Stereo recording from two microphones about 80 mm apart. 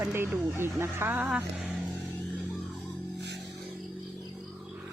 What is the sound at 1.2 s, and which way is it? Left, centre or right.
Speech, centre.